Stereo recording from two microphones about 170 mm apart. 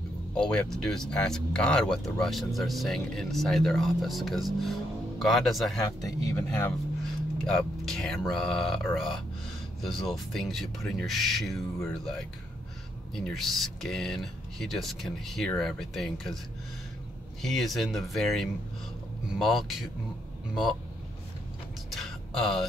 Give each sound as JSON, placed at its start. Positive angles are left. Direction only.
{"t": 0.3, "sound": "speech", "side_deg": 5}
{"t": 5.8, "sound": "speech", "side_deg": 20}
{"t": 7.4, "sound": "speech", "side_deg": 5}
{"t": 17.4, "sound": "speech", "side_deg": 0}
{"t": 21.9, "sound": "a sound", "side_deg": 0}